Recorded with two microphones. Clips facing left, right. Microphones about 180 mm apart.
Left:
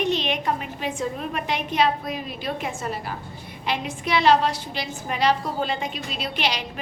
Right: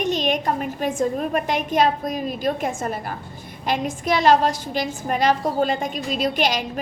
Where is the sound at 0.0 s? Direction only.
45° right (ahead or behind).